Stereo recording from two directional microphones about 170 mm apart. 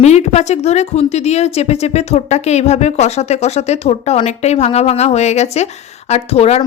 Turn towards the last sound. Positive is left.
turn(degrees=40)  # may be behind; listen again after turning